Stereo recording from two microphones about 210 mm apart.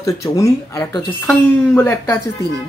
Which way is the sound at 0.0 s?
15° left (ahead or behind).